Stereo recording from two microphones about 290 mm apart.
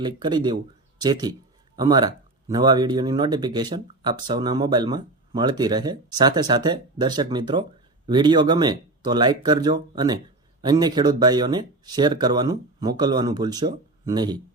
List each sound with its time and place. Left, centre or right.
0.0 s speech: centre